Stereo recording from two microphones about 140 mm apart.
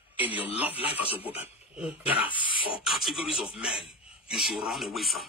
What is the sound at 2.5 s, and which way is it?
Beatboxing, 40° left (ahead or behind).